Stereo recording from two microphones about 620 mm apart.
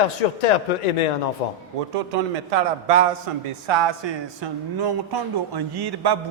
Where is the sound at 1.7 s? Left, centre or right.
Right.